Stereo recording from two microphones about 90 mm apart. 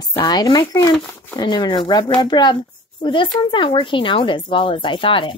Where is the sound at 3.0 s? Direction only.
70° left (ahead or behind).